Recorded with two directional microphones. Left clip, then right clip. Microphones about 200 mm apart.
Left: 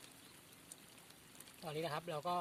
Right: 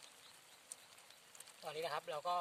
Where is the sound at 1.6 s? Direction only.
15° right (ahead or behind).